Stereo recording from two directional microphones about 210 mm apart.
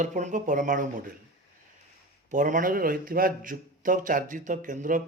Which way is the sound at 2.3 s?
35° right (ahead or behind).